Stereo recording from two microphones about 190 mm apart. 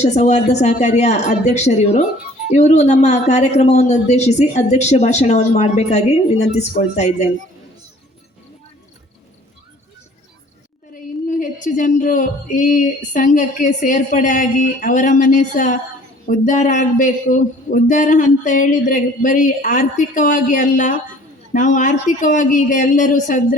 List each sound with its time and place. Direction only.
0.0 s speech: 35° left (ahead or behind)
11.3 s speech: 45° left (ahead or behind)